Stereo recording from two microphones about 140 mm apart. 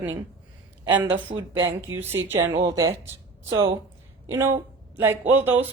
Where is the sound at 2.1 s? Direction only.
15° right (ahead or behind).